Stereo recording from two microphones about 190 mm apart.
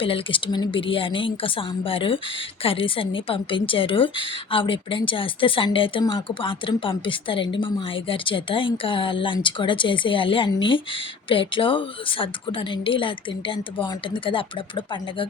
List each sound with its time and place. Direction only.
0.0 s a woman's voice: 25° left (ahead or behind)